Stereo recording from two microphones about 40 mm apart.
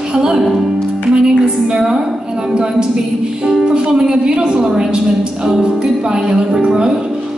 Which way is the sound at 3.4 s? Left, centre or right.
Centre.